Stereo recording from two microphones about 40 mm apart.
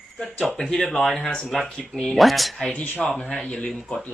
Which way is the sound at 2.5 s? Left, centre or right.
Left.